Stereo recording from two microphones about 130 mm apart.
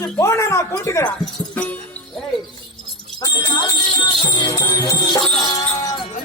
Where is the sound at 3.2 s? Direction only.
25° left (ahead or behind).